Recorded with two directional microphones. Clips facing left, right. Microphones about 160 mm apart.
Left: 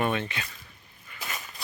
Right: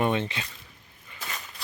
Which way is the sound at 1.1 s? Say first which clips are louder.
Left 1 dB; 25° right (ahead or behind).